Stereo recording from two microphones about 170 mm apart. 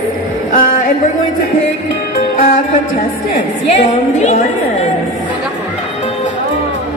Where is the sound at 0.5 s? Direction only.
50° left (ahead or behind).